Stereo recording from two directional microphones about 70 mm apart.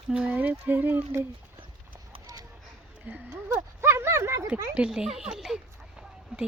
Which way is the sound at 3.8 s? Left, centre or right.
Right.